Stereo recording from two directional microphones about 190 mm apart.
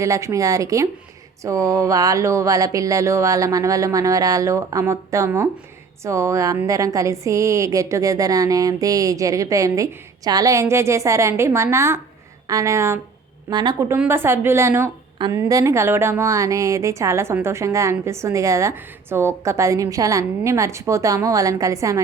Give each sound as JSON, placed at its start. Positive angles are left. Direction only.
{"t": 0.0, "sound": "a woman's voice", "side_deg": -15}